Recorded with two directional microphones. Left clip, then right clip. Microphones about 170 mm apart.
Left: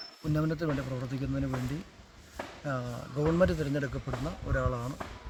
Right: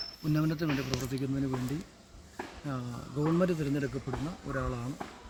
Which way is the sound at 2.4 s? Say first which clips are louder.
Left 4 dB; 35° left (ahead or behind).